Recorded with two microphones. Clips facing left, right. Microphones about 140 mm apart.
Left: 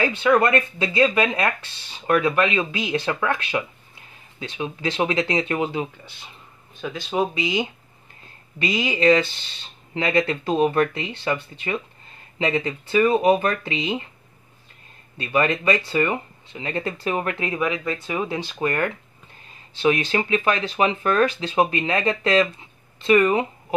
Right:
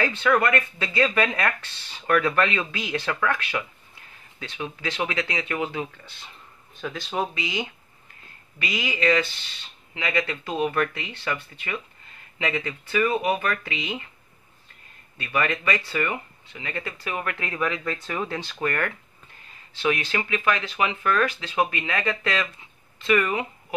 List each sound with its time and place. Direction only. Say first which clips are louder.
0.0 s speech: left 3 dB; 20° left (ahead or behind)
6.8 s speech: left 4 dB; 5° left (ahead or behind); by 14.0 s 25° left (ahead or behind)
15.1 s speech: left 5 dB; 25° left (ahead or behind)